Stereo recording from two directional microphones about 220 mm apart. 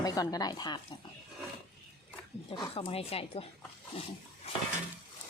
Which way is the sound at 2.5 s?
20° left (ahead or behind).